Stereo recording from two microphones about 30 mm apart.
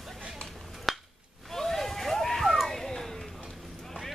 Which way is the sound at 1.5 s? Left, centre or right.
Centre.